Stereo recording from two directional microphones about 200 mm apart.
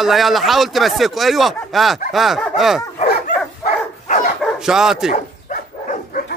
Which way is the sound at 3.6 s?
40° left (ahead or behind).